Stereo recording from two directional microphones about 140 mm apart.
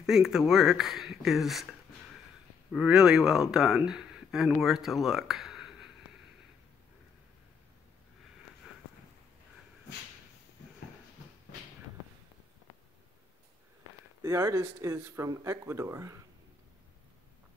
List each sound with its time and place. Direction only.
0.0 s speech: centre (ahead or behind)
8.6 s a sound: 5° right (ahead or behind)
14.2 s speech: 20° right (ahead or behind)